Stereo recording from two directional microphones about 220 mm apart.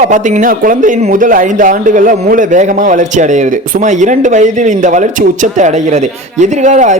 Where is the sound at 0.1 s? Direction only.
35° right (ahead or behind).